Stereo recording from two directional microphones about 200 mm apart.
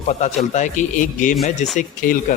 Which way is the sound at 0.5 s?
40° left (ahead or behind).